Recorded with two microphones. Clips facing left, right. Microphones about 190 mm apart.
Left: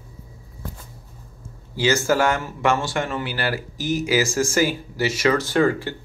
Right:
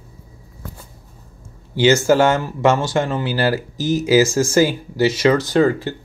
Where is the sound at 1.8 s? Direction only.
25° right (ahead or behind).